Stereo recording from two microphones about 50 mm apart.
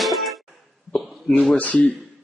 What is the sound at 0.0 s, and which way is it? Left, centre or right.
Music, centre.